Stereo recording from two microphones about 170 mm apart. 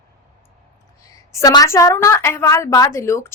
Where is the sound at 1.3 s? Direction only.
20° left (ahead or behind).